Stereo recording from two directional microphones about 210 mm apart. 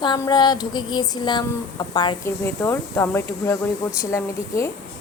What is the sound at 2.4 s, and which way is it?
Speech, 10° left (ahead or behind).